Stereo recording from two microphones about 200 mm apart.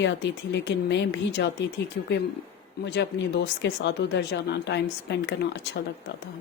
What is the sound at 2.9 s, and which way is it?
Speech, 60° left (ahead or behind).